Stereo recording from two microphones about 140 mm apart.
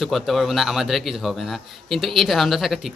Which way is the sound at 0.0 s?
Centre (ahead or behind).